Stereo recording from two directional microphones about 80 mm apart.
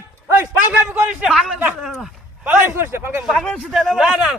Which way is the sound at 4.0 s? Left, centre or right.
Centre.